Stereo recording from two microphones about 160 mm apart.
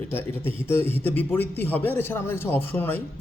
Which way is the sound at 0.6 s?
15° left (ahead or behind).